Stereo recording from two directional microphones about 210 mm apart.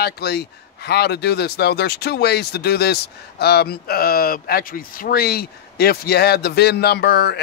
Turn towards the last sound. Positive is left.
turn(degrees=50)  # may be behind; listen again after turning